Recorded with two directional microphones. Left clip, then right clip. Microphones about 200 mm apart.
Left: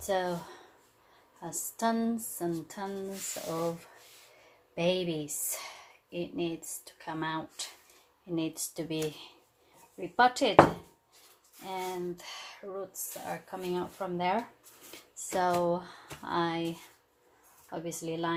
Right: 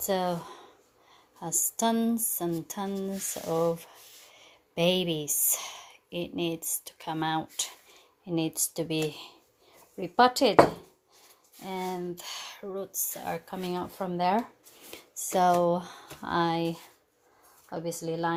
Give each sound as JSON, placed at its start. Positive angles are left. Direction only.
{"t": 0.0, "sound": "a woman's voice", "side_deg": -50}
{"t": 4.7, "sound": "a woman's voice", "side_deg": -50}
{"t": 11.6, "sound": "a woman's voice", "side_deg": -50}